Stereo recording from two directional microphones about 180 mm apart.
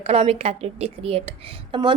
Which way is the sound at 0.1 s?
35° right (ahead or behind).